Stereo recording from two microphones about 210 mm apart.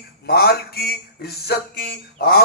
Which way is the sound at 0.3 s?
50° left (ahead or behind).